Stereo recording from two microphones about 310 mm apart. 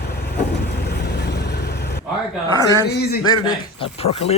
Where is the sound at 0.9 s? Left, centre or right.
Left.